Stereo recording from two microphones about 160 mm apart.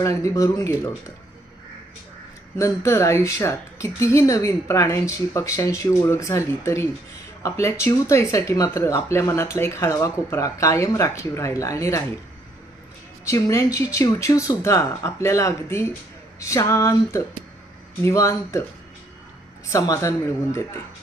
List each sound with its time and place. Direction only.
0.0 s speech: 20° left (ahead or behind)
2.6 s speech: 15° left (ahead or behind)
13.2 s speech: 20° left (ahead or behind)
19.7 s speech: 20° left (ahead or behind)